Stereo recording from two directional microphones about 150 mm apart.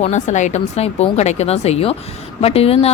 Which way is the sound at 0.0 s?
50° left (ahead or behind).